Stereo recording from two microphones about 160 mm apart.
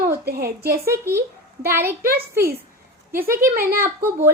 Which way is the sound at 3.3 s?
65° right (ahead or behind).